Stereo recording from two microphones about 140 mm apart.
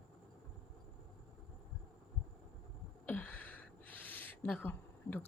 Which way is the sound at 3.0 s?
10° left (ahead or behind).